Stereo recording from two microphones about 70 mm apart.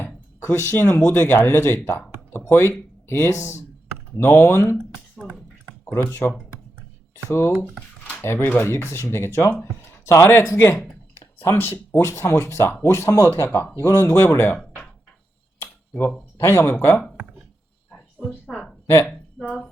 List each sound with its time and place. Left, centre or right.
0.0 s speech: left
5.1 s speech: right
6.1 s speech: left
16.4 s speech: left
18.4 s a woman's voice: centre